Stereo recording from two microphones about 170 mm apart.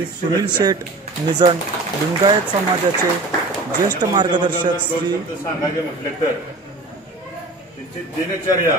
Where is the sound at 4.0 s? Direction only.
25° right (ahead or behind).